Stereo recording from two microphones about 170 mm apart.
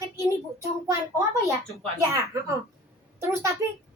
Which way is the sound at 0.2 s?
15° right (ahead or behind).